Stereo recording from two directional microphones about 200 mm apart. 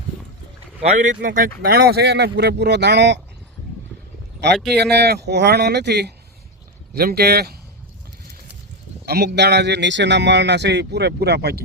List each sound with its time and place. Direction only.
0.8 s speech: 35° right (ahead or behind); by 3.2 s 60° right (ahead or behind)
4.5 s speech: centre (ahead or behind)
4.8 s speech: 55° right (ahead or behind)
9.0 s speech: 55° right (ahead or behind)